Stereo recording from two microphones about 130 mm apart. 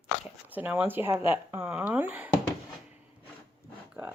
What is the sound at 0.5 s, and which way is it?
Speech, 15° right (ahead or behind).